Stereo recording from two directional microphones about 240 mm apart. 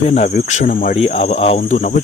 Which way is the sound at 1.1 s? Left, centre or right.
Left.